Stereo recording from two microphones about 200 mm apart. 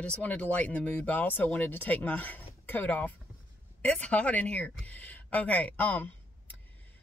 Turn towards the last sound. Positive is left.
turn(degrees=10)  # may be behind; listen again after turning